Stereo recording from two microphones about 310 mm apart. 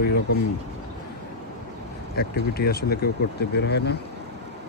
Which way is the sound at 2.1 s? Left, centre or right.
Left.